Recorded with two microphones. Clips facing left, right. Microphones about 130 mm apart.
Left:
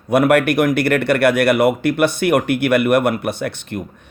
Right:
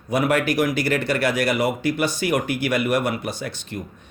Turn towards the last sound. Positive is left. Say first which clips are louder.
# left 7 dB
turn(degrees=60)  # may be behind; listen again after turning